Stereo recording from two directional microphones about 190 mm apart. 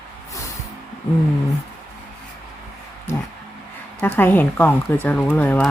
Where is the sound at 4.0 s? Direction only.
10° left (ahead or behind).